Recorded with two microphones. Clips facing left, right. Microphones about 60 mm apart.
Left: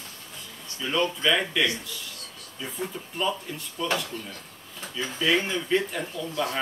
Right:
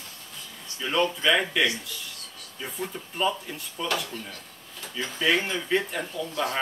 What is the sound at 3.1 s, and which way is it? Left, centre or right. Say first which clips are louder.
Speech: right 1 dB; centre.